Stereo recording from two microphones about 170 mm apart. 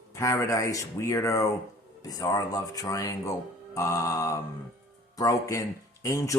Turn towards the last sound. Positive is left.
turn(degrees=20)  # may be behind; listen again after turning